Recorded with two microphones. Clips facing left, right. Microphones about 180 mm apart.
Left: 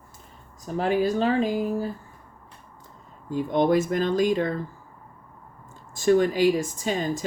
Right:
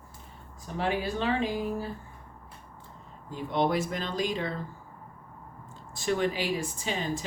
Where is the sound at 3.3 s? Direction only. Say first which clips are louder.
Left 6 dB; 50° left (ahead or behind).